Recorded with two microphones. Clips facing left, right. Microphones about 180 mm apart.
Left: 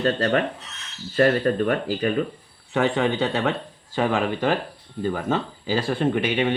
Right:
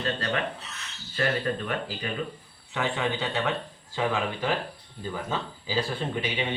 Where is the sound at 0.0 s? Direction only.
45° left (ahead or behind).